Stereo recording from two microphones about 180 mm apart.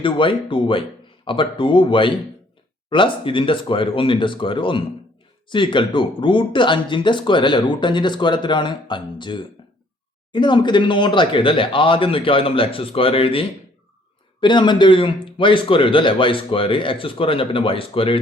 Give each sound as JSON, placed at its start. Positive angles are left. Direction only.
{"t": 0.0, "sound": "speech", "side_deg": 30}